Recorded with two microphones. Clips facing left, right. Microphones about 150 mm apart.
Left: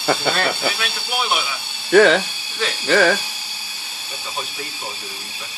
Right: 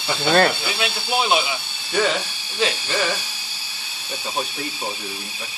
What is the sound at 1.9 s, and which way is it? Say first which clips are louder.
Speech: left 9 dB; 75° left (ahead or behind).